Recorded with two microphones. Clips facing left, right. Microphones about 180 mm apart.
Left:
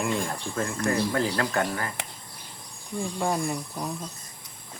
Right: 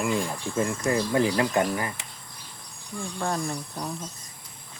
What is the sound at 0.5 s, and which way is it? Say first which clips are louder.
Speech: right 2 dB; 20° right (ahead or behind).